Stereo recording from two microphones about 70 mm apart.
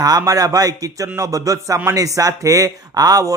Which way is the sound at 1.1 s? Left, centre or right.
Right.